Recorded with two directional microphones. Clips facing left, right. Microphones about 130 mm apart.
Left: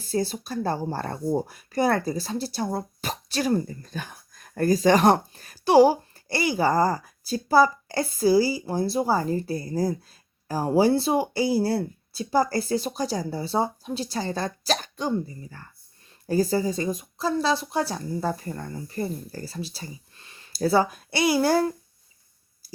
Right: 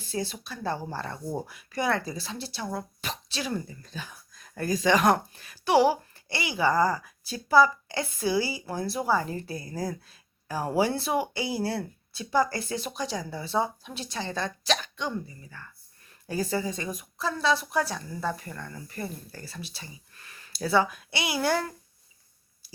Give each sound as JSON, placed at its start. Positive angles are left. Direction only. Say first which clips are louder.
{"t": 0.0, "sound": "speech", "louder": "left 6 dB", "side_deg": 40}
{"t": 3.9, "sound": "speech", "louder": "left 2 dB", "side_deg": 55}
{"t": 20.5, "sound": "speech", "louder": "left 3 dB", "side_deg": 40}